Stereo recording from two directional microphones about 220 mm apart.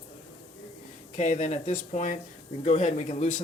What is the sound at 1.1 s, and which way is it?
Speech, 35° left (ahead or behind).